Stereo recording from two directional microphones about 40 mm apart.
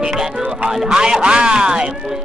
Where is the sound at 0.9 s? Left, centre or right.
Centre.